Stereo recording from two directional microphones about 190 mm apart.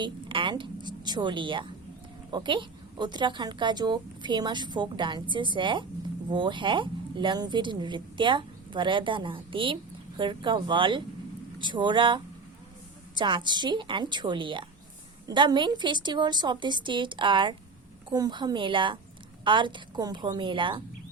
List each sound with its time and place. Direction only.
0.0 s a woman's voice: 25° right (ahead or behind)